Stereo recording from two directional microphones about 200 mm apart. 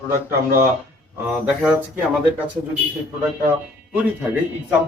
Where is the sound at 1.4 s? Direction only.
5° right (ahead or behind).